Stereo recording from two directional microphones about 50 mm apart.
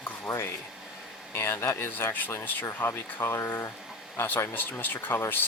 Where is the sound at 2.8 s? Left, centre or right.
Left.